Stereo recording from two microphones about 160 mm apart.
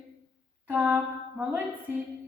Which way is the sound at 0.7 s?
10° right (ahead or behind).